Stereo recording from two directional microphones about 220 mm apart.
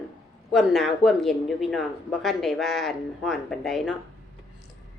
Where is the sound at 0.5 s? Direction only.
Centre (ahead or behind).